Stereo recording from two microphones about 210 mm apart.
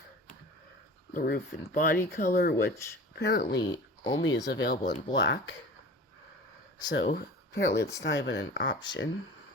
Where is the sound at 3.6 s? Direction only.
20° left (ahead or behind).